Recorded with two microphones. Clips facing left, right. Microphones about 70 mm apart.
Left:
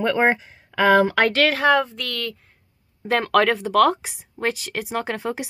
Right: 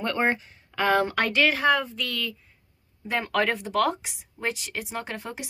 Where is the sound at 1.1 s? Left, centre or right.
Left.